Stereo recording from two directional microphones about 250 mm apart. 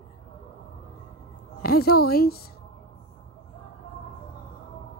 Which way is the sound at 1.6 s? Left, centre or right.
Left.